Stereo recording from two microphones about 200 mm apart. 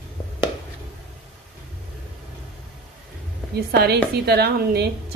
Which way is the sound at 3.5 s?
55° right (ahead or behind).